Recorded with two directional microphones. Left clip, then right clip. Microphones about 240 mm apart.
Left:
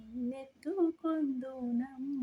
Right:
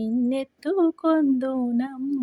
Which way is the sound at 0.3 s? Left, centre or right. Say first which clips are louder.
Right 14 dB; right.